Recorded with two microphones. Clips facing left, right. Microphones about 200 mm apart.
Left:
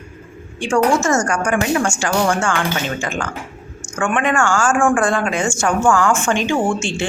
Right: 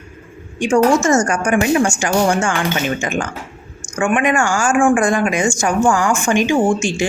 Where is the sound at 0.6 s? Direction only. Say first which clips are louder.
Right 3 dB; 20° right (ahead or behind).